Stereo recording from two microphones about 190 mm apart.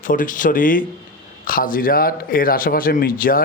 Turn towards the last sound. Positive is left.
turn(degrees=50)  # may be behind; listen again after turning